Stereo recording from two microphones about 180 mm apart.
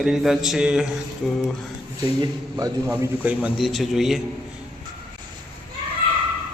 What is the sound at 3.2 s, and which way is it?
Speech, 5° right (ahead or behind).